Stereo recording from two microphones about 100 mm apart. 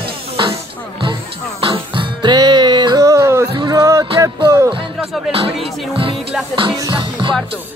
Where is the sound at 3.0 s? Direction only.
30° right (ahead or behind).